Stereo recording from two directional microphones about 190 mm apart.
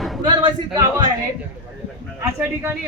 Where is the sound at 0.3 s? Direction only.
25° right (ahead or behind).